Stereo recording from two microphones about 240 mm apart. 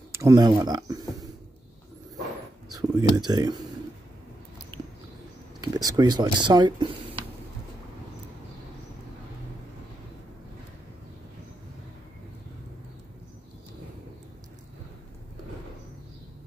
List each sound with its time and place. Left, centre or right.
0.1 s speech: centre
2.7 s speech: centre
5.6 s speech: centre